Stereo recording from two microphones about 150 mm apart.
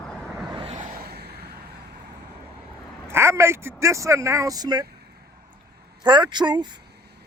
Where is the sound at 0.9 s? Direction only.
90° right.